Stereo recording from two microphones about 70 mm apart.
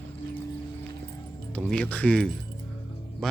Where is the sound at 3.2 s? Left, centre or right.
Centre.